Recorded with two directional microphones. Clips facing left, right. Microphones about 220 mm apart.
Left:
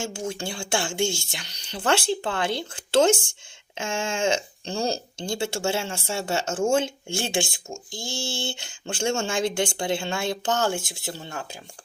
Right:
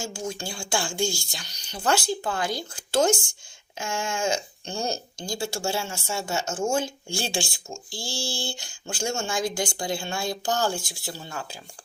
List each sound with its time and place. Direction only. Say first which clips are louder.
0.0 s speech: left 2 dB; 25° left (ahead or behind)